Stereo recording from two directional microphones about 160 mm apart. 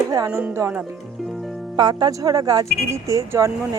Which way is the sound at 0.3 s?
15° right (ahead or behind).